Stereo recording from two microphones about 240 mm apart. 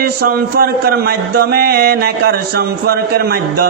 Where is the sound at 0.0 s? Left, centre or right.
Right.